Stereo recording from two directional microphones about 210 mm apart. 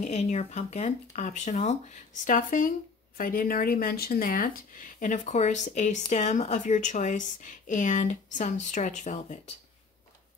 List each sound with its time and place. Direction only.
0.0 s speech: 35° left (ahead or behind)